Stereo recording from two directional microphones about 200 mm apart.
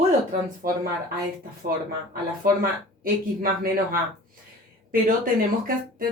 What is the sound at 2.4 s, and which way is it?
Speech, 45° right (ahead or behind).